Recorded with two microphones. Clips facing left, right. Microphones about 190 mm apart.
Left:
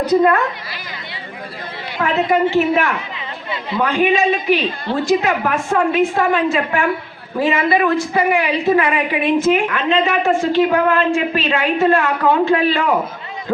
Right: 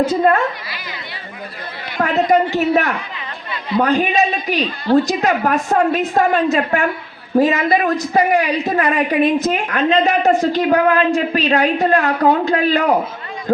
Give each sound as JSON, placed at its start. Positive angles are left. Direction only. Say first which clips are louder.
{"t": 0.1, "sound": "speech", "louder": "left 1 dB", "side_deg": -30}
{"t": 2.0, "sound": "a woman's voice", "louder": "right 1 dB", "side_deg": -40}